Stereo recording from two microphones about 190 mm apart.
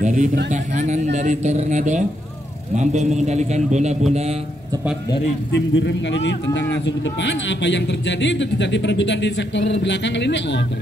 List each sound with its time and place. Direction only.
0.0 s speech: 40° right (ahead or behind)
5.5 s speech: 70° left (ahead or behind)